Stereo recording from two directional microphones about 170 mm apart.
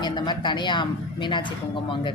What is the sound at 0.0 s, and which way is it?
A woman's voice, 25° left (ahead or behind).